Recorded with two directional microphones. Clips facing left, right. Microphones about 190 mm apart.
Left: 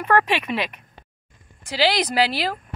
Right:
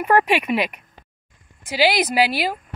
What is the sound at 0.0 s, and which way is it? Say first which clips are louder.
Speech: right 2 dB; 15° right (ahead or behind).